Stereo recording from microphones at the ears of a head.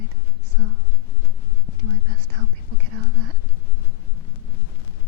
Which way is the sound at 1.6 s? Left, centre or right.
Right.